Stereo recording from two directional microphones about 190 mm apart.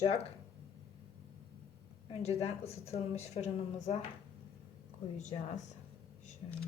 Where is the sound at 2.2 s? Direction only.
35° left (ahead or behind).